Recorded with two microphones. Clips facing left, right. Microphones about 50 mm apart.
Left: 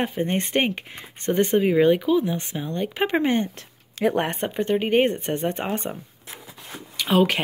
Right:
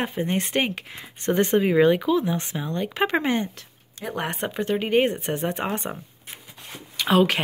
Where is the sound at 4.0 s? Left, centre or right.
Left.